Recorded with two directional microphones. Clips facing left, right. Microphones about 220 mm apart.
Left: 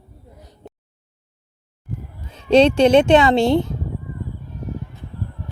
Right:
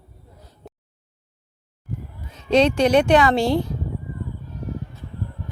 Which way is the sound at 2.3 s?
30° left (ahead or behind).